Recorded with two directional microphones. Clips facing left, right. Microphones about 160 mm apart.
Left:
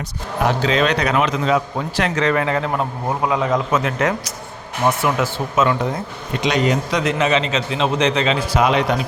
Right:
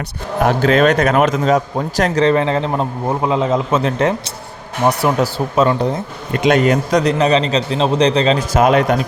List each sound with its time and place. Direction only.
0.4 s a man's voice: 50° right (ahead or behind); by 5.9 s 35° right (ahead or behind)
6.4 s speech: 50° right (ahead or behind)
7.0 s a man's voice: 35° right (ahead or behind)